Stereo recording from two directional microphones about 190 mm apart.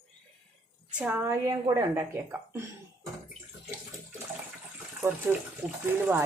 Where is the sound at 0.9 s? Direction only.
10° right (ahead or behind).